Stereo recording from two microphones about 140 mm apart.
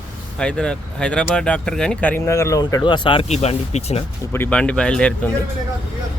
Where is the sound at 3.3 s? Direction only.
50° left (ahead or behind).